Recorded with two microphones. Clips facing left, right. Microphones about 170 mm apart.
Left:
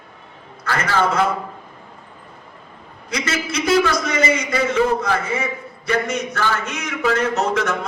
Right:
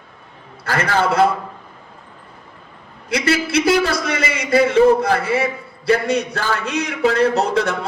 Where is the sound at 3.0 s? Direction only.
30° right (ahead or behind).